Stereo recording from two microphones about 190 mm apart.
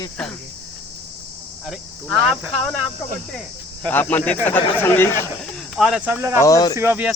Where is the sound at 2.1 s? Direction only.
Centre (ahead or behind).